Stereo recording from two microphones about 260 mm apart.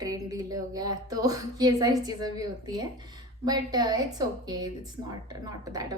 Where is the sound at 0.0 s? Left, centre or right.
Centre.